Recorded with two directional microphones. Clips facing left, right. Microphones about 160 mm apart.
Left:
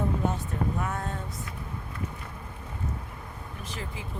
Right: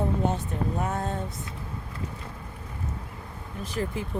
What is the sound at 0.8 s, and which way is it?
Speech, 30° right (ahead or behind).